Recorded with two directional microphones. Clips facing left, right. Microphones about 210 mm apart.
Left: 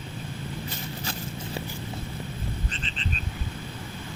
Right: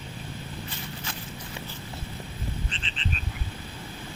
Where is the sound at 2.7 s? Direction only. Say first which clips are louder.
Left 3 dB; 40° left (ahead or behind).